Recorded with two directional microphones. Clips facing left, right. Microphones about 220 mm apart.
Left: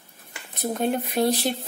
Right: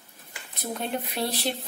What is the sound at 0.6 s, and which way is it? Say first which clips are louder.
Speech: left 6 dB; 50° left (ahead or behind).